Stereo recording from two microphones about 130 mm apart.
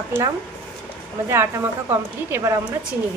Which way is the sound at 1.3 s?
20° right (ahead or behind).